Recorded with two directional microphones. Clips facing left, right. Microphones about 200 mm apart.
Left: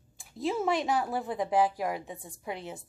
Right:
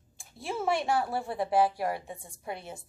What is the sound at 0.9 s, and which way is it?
A woman's voice, 15° left (ahead or behind).